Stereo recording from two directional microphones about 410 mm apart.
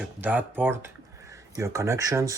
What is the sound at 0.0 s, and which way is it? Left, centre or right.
Speech, centre.